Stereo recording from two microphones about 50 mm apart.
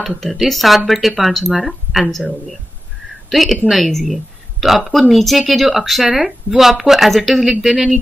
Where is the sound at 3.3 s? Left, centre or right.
Centre.